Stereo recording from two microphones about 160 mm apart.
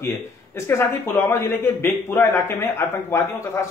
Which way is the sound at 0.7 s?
15° left (ahead or behind).